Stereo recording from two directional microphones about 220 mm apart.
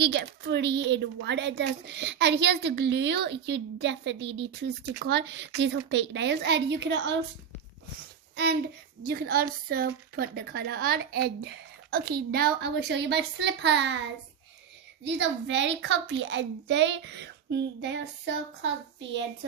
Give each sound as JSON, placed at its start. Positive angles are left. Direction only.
{"t": 0.0, "sound": "a woman's voice", "side_deg": -50}
{"t": 9.0, "sound": "a woman's voice", "side_deg": -45}
{"t": 15.0, "sound": "a woman's voice", "side_deg": -55}